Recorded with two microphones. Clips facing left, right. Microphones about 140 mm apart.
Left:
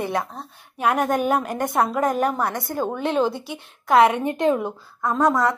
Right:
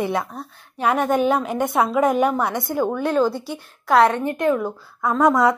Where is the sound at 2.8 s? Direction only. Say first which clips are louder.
Right 2 dB; 20° left (ahead or behind).